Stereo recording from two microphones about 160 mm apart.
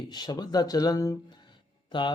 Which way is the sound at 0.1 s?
25° left (ahead or behind).